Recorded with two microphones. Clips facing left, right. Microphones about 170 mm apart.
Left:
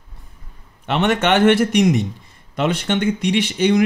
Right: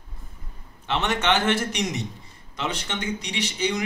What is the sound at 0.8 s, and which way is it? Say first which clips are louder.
Speech: left 6 dB; 65° left (ahead or behind).